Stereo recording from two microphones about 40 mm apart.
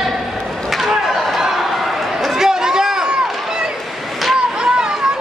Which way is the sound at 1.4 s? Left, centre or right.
Centre.